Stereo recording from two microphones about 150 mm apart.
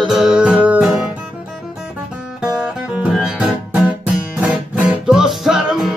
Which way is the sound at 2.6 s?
5° right (ahead or behind).